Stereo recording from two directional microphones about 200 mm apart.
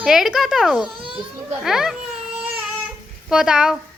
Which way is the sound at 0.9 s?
25° right (ahead or behind).